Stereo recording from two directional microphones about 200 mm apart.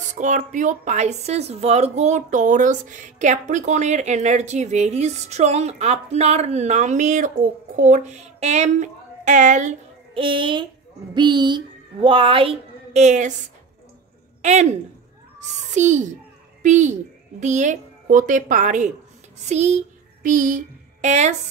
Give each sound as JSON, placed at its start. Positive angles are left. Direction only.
{"t": 0.1, "sound": "a woman's voice", "side_deg": -35}
{"t": 14.4, "sound": "a woman's voice", "side_deg": -35}